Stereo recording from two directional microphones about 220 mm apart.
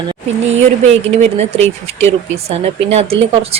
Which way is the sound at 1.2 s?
30° right (ahead or behind).